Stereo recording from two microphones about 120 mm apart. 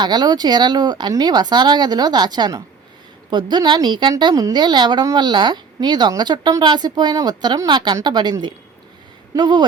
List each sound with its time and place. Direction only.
0.0 s a woman's voice: 35° right (ahead or behind)